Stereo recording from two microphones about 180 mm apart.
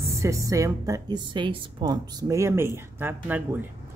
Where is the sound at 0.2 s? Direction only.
20° right (ahead or behind).